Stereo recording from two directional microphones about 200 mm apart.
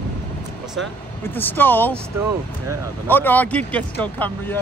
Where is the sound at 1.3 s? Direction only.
10° left (ahead or behind).